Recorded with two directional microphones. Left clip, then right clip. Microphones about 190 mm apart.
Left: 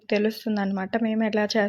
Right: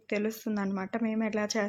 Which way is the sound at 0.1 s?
20° left (ahead or behind).